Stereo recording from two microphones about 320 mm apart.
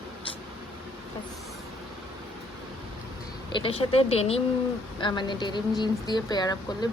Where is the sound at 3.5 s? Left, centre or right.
Centre.